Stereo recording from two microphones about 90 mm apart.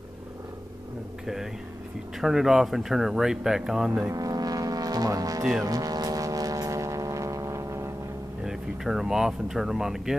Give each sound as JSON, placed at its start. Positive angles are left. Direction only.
{"t": 1.2, "sound": "speech", "side_deg": -5}
{"t": 4.1, "sound": "foghorn", "side_deg": -45}
{"t": 5.4, "sound": "speech", "side_deg": -5}
{"t": 5.7, "sound": "foghorn", "side_deg": -45}
{"t": 8.5, "sound": "speech", "side_deg": -5}